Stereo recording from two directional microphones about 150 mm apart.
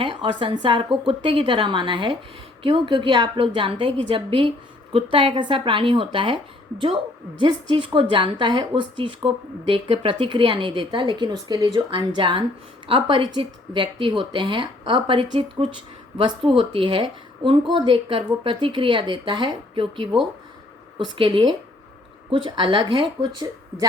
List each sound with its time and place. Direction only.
0.0 s a woman's voice: 35° right (ahead or behind)